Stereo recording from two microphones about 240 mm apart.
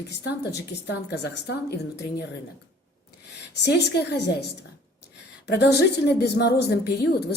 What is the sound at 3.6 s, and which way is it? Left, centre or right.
Speech, left.